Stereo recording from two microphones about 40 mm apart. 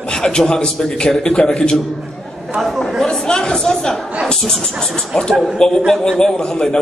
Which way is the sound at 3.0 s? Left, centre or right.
Centre.